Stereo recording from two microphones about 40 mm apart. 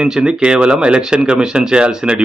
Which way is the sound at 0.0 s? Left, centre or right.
Centre.